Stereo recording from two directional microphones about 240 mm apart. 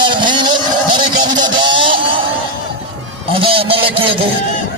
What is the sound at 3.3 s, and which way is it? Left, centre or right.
Speech, right.